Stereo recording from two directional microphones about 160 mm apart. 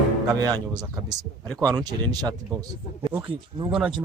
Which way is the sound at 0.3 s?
25° right (ahead or behind).